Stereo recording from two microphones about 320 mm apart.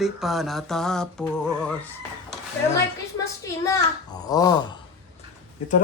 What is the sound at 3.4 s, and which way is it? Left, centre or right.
A child's voice, centre.